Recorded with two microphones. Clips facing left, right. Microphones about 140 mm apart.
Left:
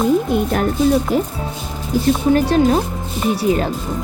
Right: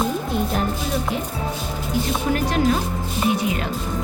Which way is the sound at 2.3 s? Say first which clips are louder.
Left 5 dB; 30° left (ahead or behind).